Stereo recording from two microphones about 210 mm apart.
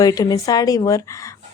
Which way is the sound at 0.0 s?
15° left (ahead or behind).